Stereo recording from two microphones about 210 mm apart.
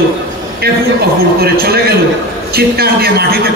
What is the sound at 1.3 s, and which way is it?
A man's voice, 45° right (ahead or behind).